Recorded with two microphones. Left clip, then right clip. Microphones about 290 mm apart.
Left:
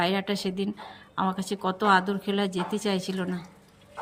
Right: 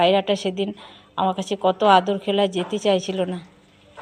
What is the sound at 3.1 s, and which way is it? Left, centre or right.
Speech, centre.